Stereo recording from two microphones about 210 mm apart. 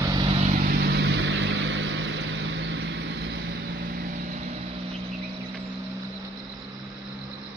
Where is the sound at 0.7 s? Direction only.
50° right (ahead or behind).